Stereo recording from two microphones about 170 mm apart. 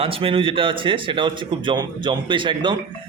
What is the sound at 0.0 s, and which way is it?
A man's voice, 35° right (ahead or behind).